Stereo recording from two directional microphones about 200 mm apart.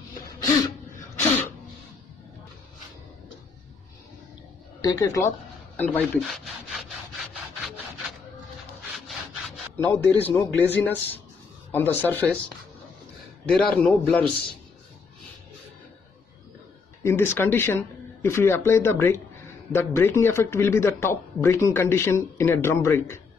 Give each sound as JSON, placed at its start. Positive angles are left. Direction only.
{"t": 0.4, "sound": "sneeze", "side_deg": 15}
{"t": 4.8, "sound": "a man's voice", "side_deg": 15}
{"t": 5.8, "sound": "rub", "side_deg": 5}
{"t": 9.8, "sound": "a man's voice", "side_deg": 10}
{"t": 13.5, "sound": "rub", "side_deg": 5}
{"t": 17.0, "sound": "a man's voice", "side_deg": 10}